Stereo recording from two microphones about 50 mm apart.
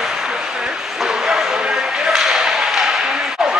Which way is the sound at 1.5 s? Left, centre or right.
Centre.